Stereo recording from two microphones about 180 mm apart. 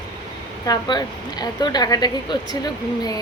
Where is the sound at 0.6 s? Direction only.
20° left (ahead or behind).